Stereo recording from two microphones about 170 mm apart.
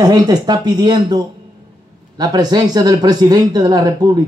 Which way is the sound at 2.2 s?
25° right (ahead or behind).